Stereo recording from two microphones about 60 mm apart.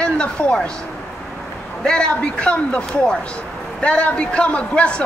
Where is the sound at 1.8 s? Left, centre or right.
Centre.